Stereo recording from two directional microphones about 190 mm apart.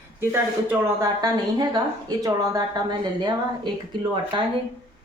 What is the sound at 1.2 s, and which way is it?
A woman's voice, 20° right (ahead or behind).